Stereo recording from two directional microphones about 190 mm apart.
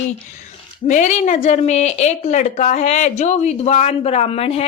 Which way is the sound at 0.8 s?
40° left (ahead or behind).